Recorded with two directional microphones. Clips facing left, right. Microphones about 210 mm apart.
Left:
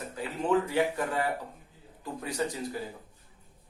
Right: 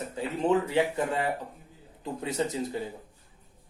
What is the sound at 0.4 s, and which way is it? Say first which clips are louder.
Speech: right 1 dB; 25° right (ahead or behind).